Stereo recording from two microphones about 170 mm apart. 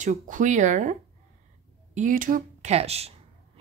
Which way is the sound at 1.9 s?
50° right (ahead or behind).